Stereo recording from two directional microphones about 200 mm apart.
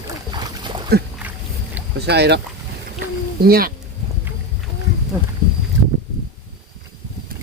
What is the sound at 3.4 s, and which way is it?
Speech, 50° right (ahead or behind).